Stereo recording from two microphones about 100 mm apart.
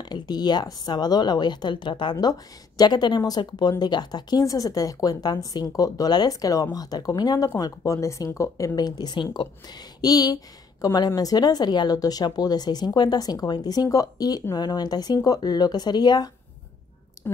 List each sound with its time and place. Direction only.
0.0 s a woman's voice: 45° left (ahead or behind)
10.0 s a woman's voice: 40° left (ahead or behind)